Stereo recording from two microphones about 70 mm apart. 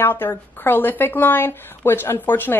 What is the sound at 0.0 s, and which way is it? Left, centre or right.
Speech, left.